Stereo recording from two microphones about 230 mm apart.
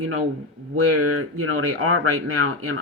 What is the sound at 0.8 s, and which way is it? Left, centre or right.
Speech, right.